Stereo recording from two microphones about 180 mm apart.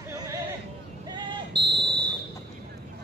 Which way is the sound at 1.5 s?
65° right (ahead or behind).